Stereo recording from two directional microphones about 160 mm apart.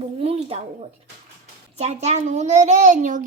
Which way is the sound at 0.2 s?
35° right (ahead or behind).